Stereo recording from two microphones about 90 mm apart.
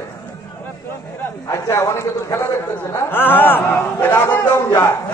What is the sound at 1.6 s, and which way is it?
A man's voice, 35° left (ahead or behind).